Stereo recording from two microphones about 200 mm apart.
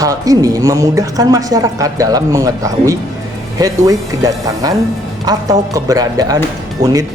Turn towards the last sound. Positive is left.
turn(degrees=-50)  # may be behind; listen again after turning